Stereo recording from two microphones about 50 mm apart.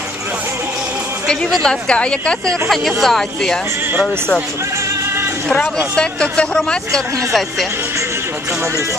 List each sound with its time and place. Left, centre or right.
1.6 s speech: centre
2.7 s speech: centre
5.9 s speech: centre